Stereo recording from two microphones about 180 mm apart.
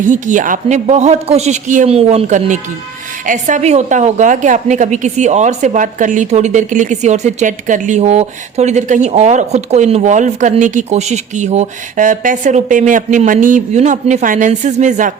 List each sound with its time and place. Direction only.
0.0 s a woman's voice: 45° right (ahead or behind)